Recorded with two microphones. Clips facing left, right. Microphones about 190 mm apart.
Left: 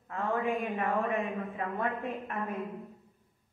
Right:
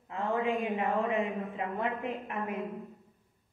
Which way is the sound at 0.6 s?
15° right (ahead or behind).